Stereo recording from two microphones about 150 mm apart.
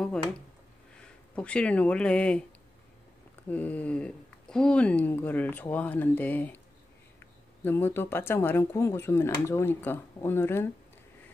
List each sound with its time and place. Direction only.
1.3 s speech: 10° left (ahead or behind)
3.4 s speech: 10° left (ahead or behind)